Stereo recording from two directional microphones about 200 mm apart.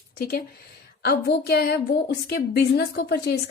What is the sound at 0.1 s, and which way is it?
A woman's voice, 50° left (ahead or behind).